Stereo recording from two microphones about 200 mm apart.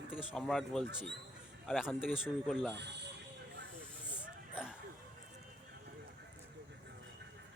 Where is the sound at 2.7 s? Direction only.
60° right (ahead or behind).